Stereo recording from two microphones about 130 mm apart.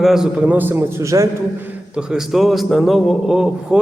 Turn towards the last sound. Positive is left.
turn(degrees=-5)  # may be behind; listen again after turning